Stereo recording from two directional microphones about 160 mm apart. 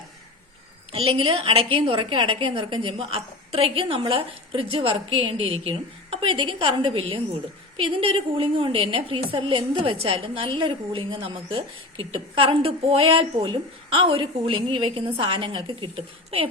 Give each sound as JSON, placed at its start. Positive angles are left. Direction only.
{"t": 0.9, "sound": "a woman's voice", "side_deg": -35}